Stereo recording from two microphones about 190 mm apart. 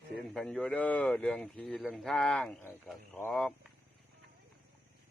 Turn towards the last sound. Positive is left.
turn(degrees=5)  # may be behind; listen again after turning